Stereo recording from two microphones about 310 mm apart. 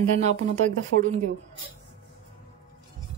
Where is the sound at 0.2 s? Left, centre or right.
Right.